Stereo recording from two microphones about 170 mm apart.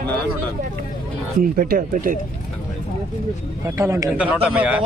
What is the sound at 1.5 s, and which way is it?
Speech, 60° right (ahead or behind).